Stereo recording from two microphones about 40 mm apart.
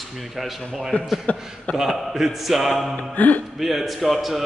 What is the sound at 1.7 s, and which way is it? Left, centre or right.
A man's voice, centre.